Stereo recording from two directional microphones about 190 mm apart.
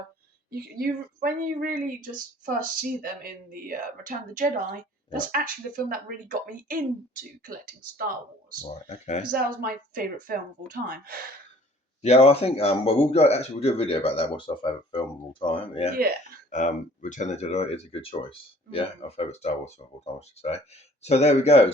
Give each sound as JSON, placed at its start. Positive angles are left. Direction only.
{"t": 0.5, "sound": "speech", "side_deg": -55}
{"t": 8.6, "sound": "speech", "side_deg": 35}
{"t": 9.2, "sound": "speech", "side_deg": -50}
{"t": 12.0, "sound": "speech", "side_deg": 35}
{"t": 16.5, "sound": "speech", "side_deg": 40}